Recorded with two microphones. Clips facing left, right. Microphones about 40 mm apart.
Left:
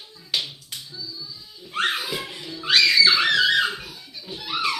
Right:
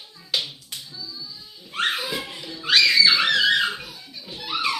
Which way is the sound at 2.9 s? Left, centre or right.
Right.